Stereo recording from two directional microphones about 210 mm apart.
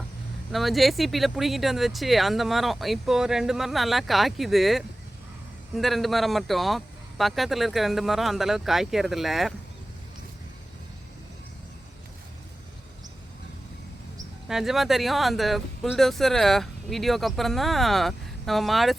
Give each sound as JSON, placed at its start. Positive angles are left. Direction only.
{"t": 0.5, "sound": "speech", "side_deg": 0}
{"t": 14.4, "sound": "speech", "side_deg": 0}